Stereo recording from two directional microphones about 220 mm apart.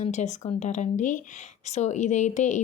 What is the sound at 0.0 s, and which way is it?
Speech, 30° left (ahead or behind).